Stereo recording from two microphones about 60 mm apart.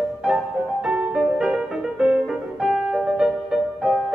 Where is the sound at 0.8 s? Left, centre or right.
Centre.